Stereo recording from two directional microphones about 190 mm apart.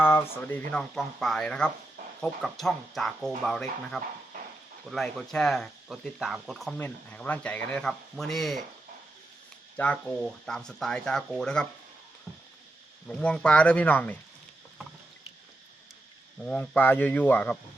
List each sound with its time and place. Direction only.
0.0 s speech: 10° left (ahead or behind)
9.7 s speech: 5° left (ahead or behind)
13.1 s speech: 5° left (ahead or behind)
16.4 s speech: 5° left (ahead or behind)